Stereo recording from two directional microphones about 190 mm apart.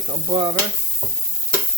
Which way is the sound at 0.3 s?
30° right (ahead or behind).